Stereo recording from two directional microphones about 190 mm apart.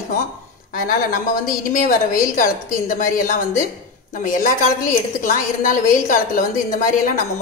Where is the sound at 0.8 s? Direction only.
50° left (ahead or behind).